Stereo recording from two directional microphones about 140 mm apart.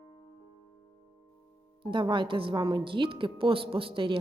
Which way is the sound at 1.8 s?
35° right (ahead or behind).